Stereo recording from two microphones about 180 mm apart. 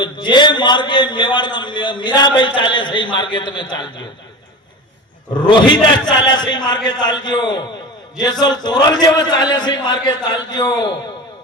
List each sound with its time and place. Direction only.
0.0 s a man's voice: 25° left (ahead or behind)
5.3 s a man's voice: 25° left (ahead or behind)
8.6 s a man's voice: 25° left (ahead or behind)